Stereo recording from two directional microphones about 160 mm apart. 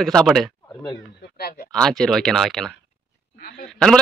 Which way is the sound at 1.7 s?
5° left (ahead or behind).